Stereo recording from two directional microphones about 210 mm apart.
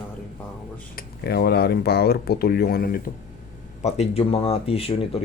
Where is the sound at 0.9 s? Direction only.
50° left (ahead or behind).